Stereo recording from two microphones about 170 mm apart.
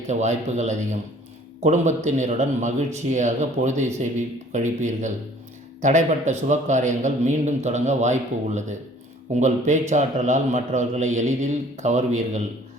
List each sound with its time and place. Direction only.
0.1 s a man's voice: 45° right (ahead or behind)